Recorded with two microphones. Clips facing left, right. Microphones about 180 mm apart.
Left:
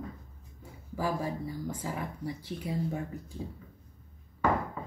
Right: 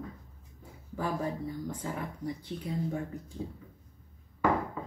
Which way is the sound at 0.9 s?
5° left (ahead or behind).